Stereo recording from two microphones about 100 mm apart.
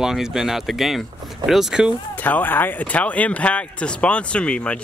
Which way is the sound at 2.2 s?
15° left (ahead or behind).